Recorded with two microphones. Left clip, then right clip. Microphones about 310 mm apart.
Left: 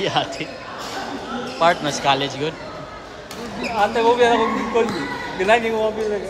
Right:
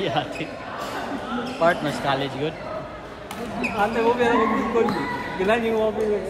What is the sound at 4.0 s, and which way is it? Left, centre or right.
Speech, left.